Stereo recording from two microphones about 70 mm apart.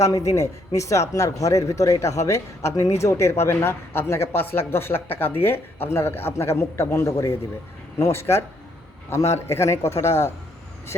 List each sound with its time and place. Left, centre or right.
0.0 s a man's voice: left